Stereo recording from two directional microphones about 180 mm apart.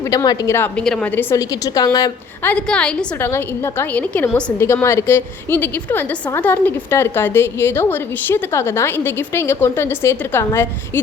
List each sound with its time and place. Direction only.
0.0 s a woman's voice: 20° left (ahead or behind)
2.5 s a woman's voice: 5° left (ahead or behind)